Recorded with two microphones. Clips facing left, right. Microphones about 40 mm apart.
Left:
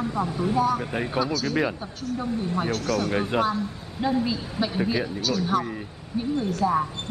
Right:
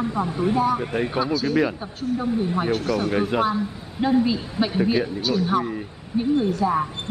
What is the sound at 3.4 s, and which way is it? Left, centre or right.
A woman's voice, right.